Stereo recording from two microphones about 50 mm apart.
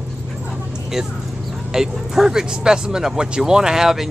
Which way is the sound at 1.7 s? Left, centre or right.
Centre.